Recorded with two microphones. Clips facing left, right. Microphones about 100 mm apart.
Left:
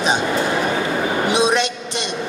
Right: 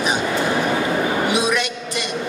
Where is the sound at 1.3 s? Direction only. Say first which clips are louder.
Left 3 dB; 25° left (ahead or behind).